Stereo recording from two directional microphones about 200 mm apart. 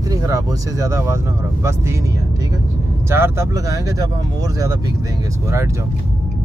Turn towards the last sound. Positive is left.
turn(degrees=-15)  # may be behind; listen again after turning